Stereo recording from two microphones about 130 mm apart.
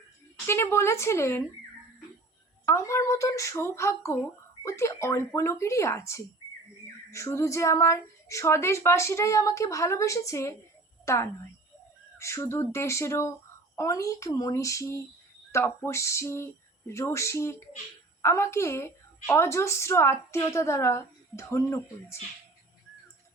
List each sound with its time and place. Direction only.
0.4 s a woman's voice: 20° left (ahead or behind)
2.6 s a woman's voice: 20° left (ahead or behind)